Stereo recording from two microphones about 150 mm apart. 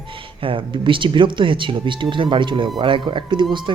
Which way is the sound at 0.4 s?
35° right (ahead or behind).